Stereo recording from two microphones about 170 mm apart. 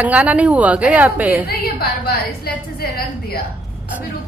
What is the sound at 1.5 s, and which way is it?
A woman's voice, 65° left (ahead or behind).